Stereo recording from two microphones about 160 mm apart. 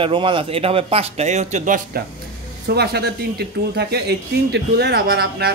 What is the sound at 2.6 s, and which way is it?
A man's voice, 85° right.